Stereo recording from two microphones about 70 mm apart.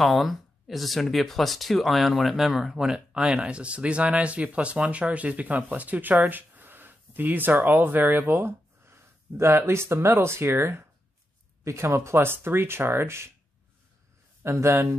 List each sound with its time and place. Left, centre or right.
0.1 s speech: centre; by 13.3 s right
14.4 s speech: right